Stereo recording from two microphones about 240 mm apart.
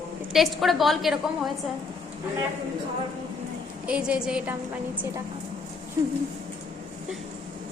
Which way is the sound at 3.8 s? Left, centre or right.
Centre.